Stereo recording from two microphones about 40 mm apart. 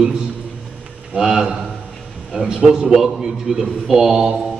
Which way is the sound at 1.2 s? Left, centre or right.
Centre.